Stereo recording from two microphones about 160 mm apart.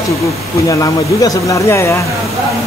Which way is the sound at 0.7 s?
20° left (ahead or behind).